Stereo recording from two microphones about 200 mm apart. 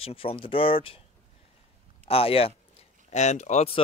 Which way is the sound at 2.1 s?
30° left (ahead or behind).